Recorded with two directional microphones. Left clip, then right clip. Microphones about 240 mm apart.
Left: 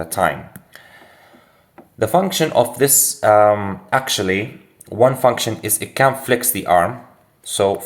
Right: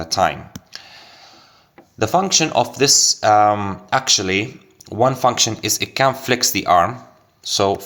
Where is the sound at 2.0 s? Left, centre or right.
Right.